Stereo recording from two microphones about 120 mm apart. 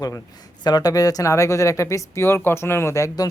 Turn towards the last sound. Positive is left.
turn(degrees=30)  # may be behind; listen again after turning